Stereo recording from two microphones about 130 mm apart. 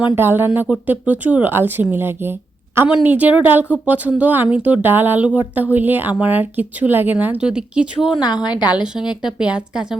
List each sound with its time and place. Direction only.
0.2 s speech: 15° right (ahead or behind)
8.1 s a woman's voice: 35° left (ahead or behind)
8.7 s a woman's voice: 5° right (ahead or behind)